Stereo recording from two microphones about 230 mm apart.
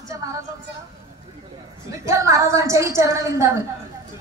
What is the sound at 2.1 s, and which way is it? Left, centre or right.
A woman's voice, centre.